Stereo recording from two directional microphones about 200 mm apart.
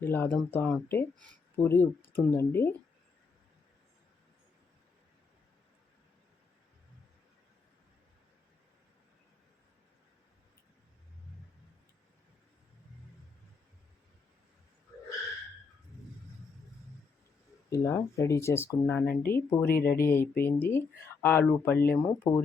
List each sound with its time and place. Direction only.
0.0 s speech: 10° left (ahead or behind)
17.7 s speech: 15° left (ahead or behind)
19.6 s speech: 50° left (ahead or behind)
20.1 s speech: 10° left (ahead or behind)